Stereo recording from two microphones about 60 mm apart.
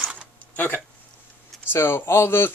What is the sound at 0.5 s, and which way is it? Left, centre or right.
Speech, left.